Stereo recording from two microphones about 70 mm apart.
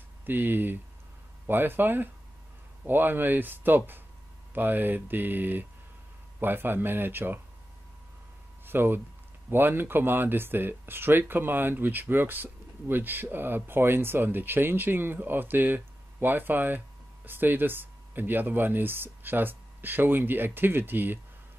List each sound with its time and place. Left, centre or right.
0.2 s speech: right
8.6 s speech: right